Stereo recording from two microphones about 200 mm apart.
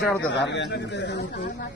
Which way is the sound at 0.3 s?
60° left (ahead or behind).